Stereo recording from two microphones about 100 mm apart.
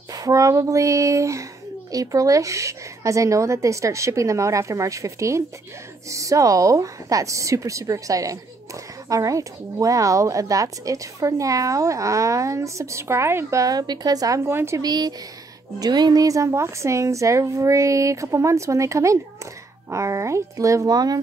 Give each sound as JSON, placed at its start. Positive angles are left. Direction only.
{"t": 0.1, "sound": "speech", "side_deg": -35}
{"t": 14.8, "sound": "speech", "side_deg": -40}